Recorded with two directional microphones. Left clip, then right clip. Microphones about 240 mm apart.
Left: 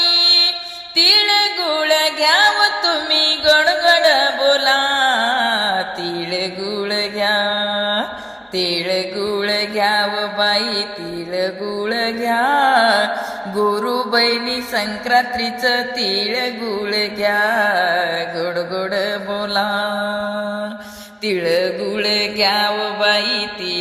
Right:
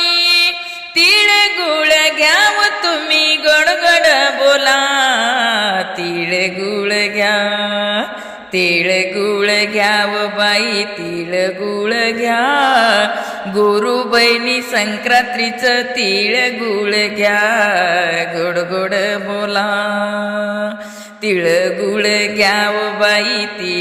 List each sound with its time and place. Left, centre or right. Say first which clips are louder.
0.0 s music: right 1 dB; right
6.3 s mantra: right 7 dB; right
11.3 s music: right 4 dB; right
21.2 s mantra: right 4 dB; right